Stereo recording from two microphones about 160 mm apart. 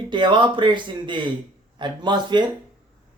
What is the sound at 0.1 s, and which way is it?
Speech, 30° right (ahead or behind).